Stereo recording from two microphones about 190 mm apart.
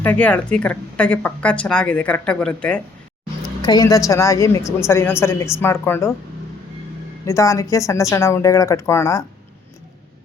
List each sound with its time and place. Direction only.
0.0 s speech: 10° left (ahead or behind)
3.6 s speech: 20° left (ahead or behind)
7.3 s speech: 15° left (ahead or behind)